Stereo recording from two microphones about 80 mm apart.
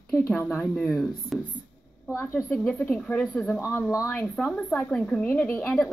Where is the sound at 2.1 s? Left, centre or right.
Left.